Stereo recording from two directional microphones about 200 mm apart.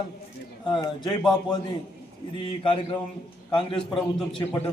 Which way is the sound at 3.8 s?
Centre (ahead or behind).